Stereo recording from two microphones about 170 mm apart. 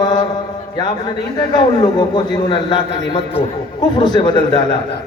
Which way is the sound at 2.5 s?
30° left (ahead or behind).